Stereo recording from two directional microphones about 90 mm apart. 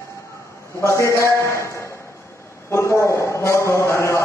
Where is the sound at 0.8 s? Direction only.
35° left (ahead or behind).